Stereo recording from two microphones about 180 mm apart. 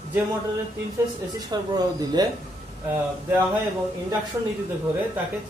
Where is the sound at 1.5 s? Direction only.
20° right (ahead or behind).